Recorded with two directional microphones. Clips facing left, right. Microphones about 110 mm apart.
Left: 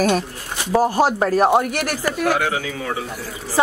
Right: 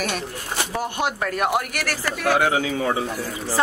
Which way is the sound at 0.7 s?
35° left (ahead or behind).